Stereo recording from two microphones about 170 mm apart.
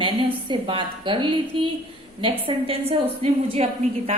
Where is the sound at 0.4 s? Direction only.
30° right (ahead or behind).